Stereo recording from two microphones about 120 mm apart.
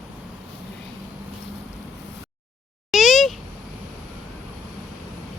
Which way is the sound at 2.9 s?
Centre (ahead or behind).